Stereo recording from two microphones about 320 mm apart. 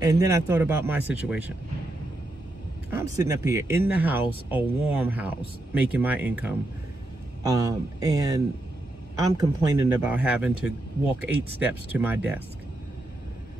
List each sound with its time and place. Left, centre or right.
0.0 s a man's voice: centre
2.9 s a man's voice: centre